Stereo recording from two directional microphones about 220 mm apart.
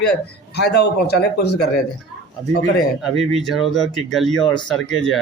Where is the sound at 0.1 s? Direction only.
50° left (ahead or behind).